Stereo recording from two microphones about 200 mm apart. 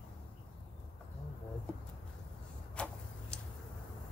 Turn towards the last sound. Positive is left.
turn(degrees=5)  # may be behind; listen again after turning